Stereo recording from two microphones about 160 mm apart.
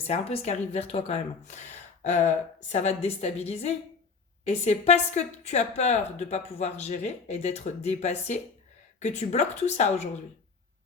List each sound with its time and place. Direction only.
0.1 s a woman's voice: 40° left (ahead or behind)